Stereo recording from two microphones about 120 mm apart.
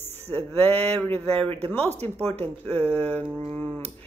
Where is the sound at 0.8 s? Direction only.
55° right (ahead or behind).